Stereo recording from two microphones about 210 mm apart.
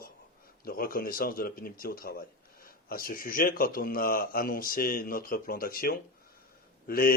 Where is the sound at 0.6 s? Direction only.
45° left (ahead or behind).